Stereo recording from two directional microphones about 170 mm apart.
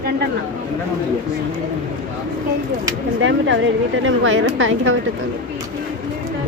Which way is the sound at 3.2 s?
90° right.